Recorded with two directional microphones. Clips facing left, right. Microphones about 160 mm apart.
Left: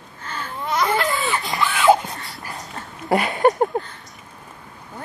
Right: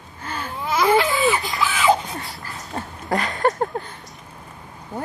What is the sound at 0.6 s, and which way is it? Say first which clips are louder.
Baby cry: right 3 dB; 5° right (ahead or behind).